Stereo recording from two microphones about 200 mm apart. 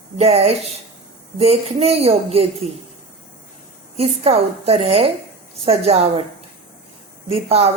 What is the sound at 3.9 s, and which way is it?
A woman's voice, 30° right (ahead or behind).